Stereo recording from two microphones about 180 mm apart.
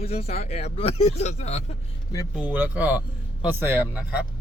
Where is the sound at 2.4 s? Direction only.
10° right (ahead or behind).